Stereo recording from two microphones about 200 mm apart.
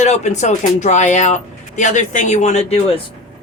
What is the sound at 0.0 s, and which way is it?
Speech, 35° left (ahead or behind).